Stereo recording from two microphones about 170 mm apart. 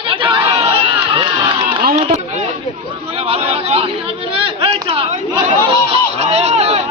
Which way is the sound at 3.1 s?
35° right (ahead or behind).